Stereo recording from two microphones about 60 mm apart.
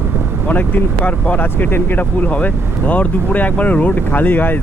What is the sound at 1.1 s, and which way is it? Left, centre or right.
Speech, left.